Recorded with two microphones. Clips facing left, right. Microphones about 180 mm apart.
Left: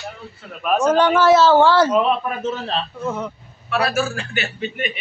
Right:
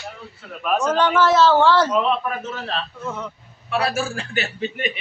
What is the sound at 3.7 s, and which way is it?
A man's voice, 25° right (ahead or behind).